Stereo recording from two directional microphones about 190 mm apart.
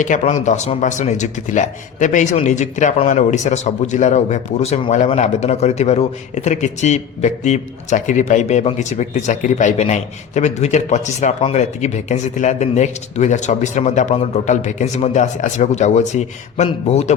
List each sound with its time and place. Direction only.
0.0 s a man's voice: 40° left (ahead or behind)